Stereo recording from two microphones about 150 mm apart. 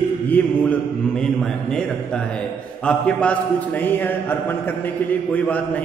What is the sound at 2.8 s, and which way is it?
A man's voice, 5° left (ahead or behind).